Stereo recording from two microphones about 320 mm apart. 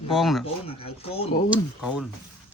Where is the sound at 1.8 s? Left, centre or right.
Centre.